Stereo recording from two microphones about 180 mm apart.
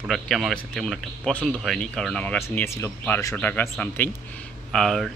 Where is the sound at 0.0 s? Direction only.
Centre (ahead or behind).